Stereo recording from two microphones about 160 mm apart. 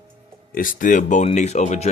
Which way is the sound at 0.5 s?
60° left (ahead or behind).